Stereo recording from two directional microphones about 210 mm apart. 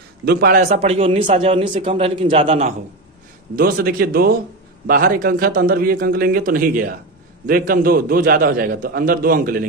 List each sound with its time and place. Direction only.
0.2 s a man's voice: 50° right (ahead or behind)
0.7 s a man's voice: 30° right (ahead or behind)
3.5 s a man's voice: 45° right (ahead or behind)